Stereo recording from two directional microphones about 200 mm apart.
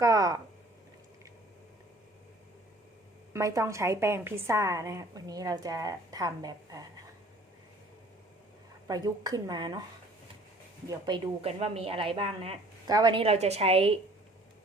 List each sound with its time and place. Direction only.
0.0 s a woman's voice: 15° right (ahead or behind)
3.3 s a woman's voice: 15° right (ahead or behind)
8.9 s a woman's voice: 20° right (ahead or behind)
10.8 s a woman's voice: 20° right (ahead or behind)